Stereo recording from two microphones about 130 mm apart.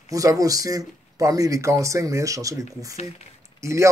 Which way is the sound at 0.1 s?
25° right (ahead or behind).